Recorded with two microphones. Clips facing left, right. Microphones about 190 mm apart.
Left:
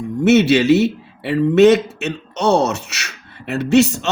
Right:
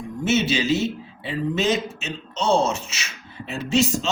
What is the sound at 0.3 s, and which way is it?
A man's voice, 70° left (ahead or behind).